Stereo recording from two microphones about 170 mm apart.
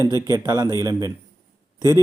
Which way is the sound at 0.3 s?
20° right (ahead or behind).